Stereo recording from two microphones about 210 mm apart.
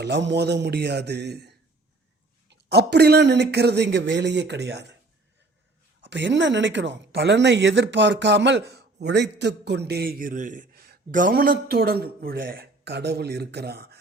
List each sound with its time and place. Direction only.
0.0 s speech: 55° right (ahead or behind)
6.1 s speech: 55° right (ahead or behind)